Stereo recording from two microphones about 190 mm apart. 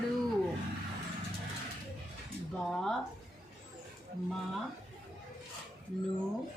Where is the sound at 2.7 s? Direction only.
Centre (ahead or behind).